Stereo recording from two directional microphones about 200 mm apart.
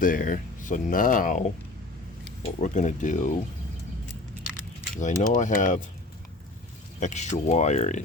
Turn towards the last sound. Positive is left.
turn(degrees=35)  # may be behind; listen again after turning